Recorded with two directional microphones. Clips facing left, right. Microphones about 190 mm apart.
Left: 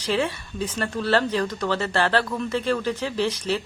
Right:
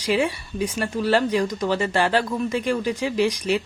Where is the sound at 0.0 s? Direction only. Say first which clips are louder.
Right 2 dB; 10° right (ahead or behind).